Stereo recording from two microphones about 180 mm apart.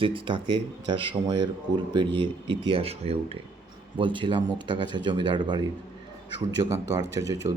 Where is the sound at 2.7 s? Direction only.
30° right (ahead or behind).